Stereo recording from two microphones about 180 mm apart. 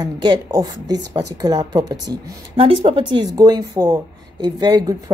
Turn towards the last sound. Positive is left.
turn(degrees=-20)  # may be behind; listen again after turning